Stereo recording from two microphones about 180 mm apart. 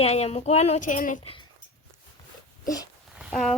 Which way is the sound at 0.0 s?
35° left (ahead or behind).